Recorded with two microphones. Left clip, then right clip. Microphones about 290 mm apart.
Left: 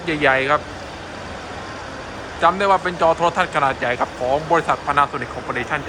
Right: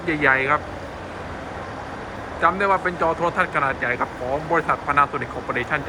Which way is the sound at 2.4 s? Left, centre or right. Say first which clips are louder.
Left 3 dB; centre.